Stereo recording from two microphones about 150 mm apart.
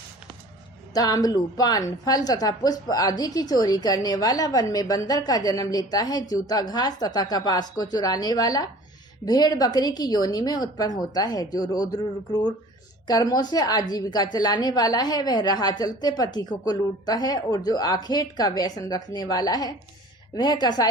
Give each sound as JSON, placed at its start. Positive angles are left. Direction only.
{"t": 0.9, "sound": "a woman's voice", "side_deg": 25}